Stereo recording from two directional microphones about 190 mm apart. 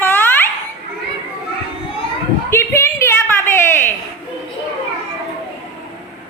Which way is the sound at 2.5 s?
15° left (ahead or behind).